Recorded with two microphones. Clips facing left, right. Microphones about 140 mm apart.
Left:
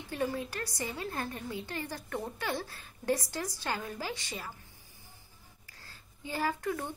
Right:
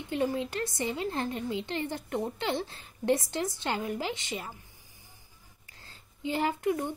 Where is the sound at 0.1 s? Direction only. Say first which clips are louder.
Right 4 dB; 20° right (ahead or behind).